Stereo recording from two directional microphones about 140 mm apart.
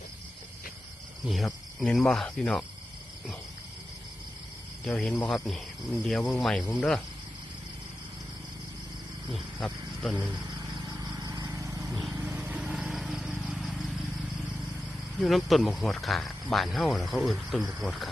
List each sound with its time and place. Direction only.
1.3 s speech: centre (ahead or behind)
4.9 s speech: 5° left (ahead or behind)
9.3 s speech: centre (ahead or behind)
10.8 s vehicle: 25° right (ahead or behind)
12.2 s lawn mower: 10° right (ahead or behind)
15.2 s speech: centre (ahead or behind)